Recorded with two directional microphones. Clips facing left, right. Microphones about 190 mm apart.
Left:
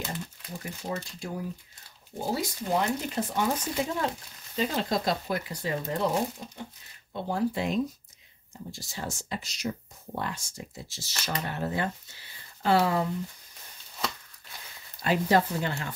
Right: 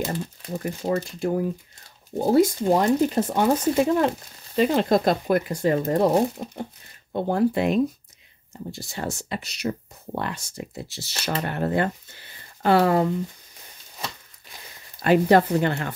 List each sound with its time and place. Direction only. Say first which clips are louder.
0.5 s speech: right 10 dB; 55° right (ahead or behind)
2.8 s speech: right 9 dB; 45° right (ahead or behind)
15.0 s speech: right 7 dB; 60° right (ahead or behind)